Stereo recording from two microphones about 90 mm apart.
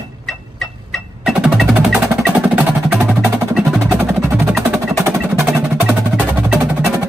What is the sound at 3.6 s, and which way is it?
Music, 5° left (ahead or behind).